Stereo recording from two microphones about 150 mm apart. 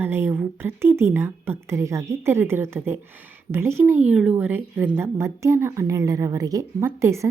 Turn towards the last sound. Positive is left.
turn(degrees=-20)  # may be behind; listen again after turning